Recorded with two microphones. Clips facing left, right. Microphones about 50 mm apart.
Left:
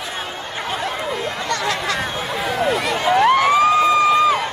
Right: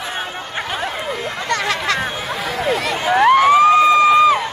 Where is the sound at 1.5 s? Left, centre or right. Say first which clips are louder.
Right 3 dB; right.